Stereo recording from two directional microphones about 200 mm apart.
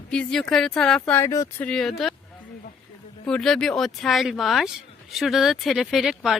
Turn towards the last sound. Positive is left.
turn(degrees=0)  # may be behind; listen again after turning